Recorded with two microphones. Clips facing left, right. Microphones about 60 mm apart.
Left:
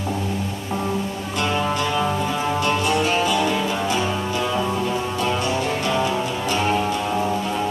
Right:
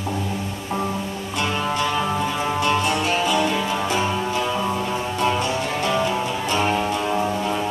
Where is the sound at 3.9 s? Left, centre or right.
Centre.